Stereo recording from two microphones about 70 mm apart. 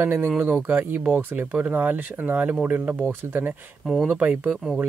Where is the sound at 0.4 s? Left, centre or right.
Right.